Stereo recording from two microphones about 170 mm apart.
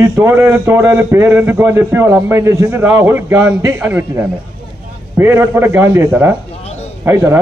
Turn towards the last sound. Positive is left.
turn(degrees=-15)  # may be behind; listen again after turning